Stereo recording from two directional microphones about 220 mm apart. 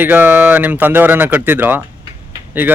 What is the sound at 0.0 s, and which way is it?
Speech, 10° right (ahead or behind).